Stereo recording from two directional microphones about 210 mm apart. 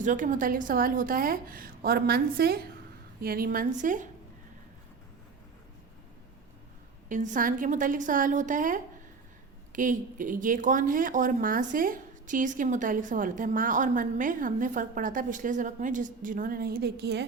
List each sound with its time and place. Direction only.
0.0 s a woman's voice: 40° right (ahead or behind)
7.1 s speech: 35° right (ahead or behind); by 17.2 s 50° right (ahead or behind)